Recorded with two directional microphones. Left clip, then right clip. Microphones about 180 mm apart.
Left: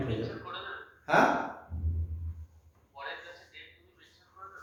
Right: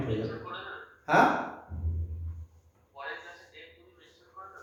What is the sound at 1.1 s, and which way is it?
Speech, 5° left (ahead or behind).